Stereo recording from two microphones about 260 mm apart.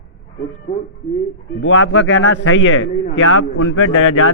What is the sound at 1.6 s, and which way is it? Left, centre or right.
A man's voice, left.